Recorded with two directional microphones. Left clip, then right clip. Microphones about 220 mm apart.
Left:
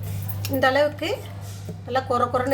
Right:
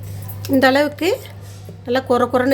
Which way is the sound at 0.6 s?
50° right (ahead or behind).